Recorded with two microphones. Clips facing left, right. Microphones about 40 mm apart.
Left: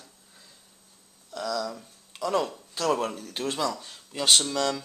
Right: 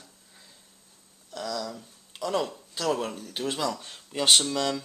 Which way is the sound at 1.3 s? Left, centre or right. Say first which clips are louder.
Left 3 dB; centre.